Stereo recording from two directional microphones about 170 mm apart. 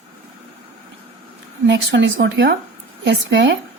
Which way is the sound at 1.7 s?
90° right.